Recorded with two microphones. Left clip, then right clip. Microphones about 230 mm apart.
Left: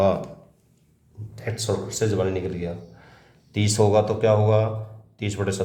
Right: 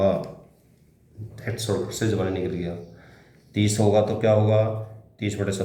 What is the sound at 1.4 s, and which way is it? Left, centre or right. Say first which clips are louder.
Speech: even; left.